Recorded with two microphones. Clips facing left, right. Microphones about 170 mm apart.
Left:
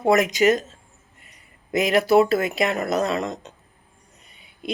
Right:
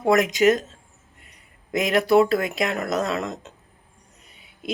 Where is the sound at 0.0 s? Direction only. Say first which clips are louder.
Even; centre (ahead or behind).